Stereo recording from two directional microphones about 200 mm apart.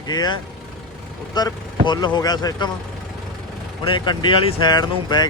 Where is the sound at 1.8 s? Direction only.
20° left (ahead or behind).